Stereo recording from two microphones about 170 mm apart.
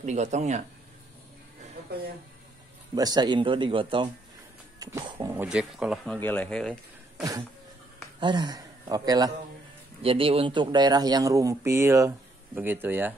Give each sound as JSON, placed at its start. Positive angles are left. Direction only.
{"t": 0.0, "sound": "speech", "side_deg": -45}
{"t": 2.9, "sound": "speech", "side_deg": -25}
{"t": 4.7, "sound": "a sound", "side_deg": -20}
{"t": 5.3, "sound": "speech", "side_deg": -10}
{"t": 6.1, "sound": "speech", "side_deg": 10}
{"t": 8.2, "sound": "a man's voice", "side_deg": -25}
{"t": 10.0, "sound": "speech", "side_deg": -35}